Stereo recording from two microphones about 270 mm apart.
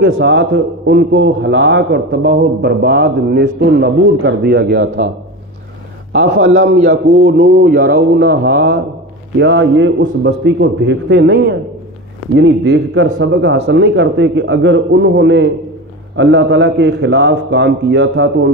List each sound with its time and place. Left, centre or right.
0.0 s a man's voice: right
6.8 s a man's voice: right